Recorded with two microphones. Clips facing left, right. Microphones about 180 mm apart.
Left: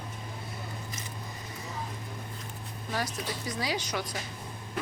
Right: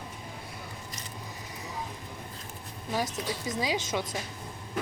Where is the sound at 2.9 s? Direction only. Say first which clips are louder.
Right 2 dB; 20° right (ahead or behind).